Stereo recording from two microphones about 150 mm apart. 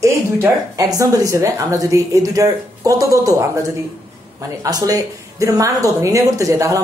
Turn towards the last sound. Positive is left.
turn(degrees=-20)  # may be behind; listen again after turning